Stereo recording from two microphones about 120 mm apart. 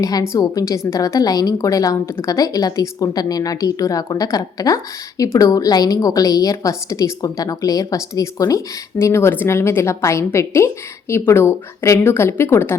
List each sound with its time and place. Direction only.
0.0 s a woman's voice: 30° left (ahead or behind)